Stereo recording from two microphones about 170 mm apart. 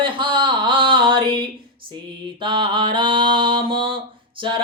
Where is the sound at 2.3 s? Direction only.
30° right (ahead or behind).